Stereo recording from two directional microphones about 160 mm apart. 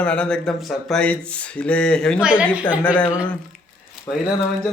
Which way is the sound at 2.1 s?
10° right (ahead or behind).